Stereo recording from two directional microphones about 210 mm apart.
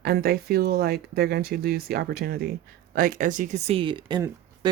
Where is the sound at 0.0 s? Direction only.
45° right (ahead or behind).